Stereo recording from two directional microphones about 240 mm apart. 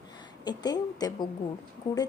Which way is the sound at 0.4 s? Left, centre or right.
Centre.